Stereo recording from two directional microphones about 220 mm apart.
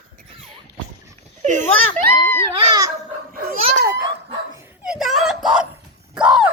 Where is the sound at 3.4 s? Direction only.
45° right (ahead or behind).